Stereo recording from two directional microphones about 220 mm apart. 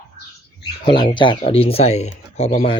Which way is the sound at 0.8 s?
20° left (ahead or behind).